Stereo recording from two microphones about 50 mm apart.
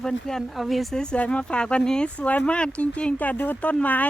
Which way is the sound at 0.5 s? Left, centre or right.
Centre.